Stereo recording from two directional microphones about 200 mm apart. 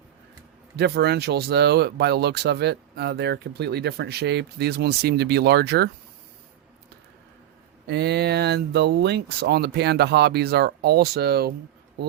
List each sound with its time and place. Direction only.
0.8 s speech: 55° right (ahead or behind)
7.9 s speech: 55° right (ahead or behind)